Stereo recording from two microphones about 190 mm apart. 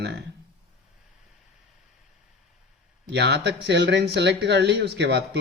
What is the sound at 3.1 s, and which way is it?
Speech, 65° right (ahead or behind).